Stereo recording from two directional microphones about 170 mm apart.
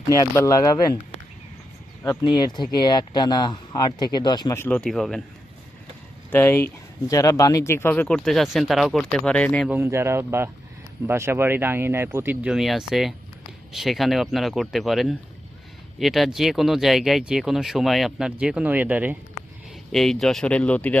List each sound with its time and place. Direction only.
0.2 s speech: 20° left (ahead or behind)
2.2 s speech: 25° left (ahead or behind); by 5.2 s centre (ahead or behind)
6.3 s speech: 15° left (ahead or behind)
9.6 s speech: 15° right (ahead or behind)
19.9 s speech: centre (ahead or behind)